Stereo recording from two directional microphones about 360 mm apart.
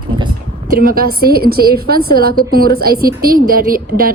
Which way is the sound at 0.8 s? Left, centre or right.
Right.